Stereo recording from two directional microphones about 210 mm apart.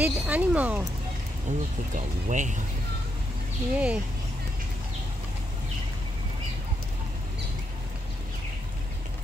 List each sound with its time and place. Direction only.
0.0 s speech: 5° right (ahead or behind)
1.5 s speech: 35° right (ahead or behind)
3.7 s speech: 5° right (ahead or behind)